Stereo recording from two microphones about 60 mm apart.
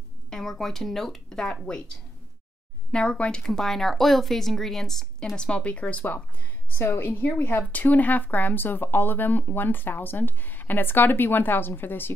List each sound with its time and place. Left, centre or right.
0.3 s speech: centre
2.9 s speech: centre
6.7 s speech: left